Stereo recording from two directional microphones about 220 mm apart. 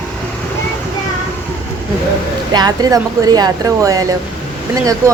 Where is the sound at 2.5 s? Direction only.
15° right (ahead or behind).